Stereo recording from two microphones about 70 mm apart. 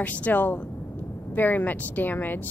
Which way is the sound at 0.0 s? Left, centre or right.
Left.